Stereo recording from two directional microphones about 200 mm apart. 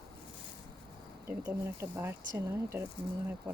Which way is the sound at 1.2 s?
10° right (ahead or behind).